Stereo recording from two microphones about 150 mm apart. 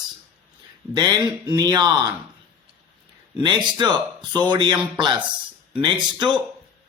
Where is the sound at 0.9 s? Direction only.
30° right (ahead or behind).